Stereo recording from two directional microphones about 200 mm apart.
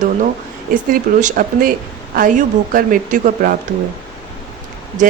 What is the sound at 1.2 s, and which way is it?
Speech, 45° right (ahead or behind).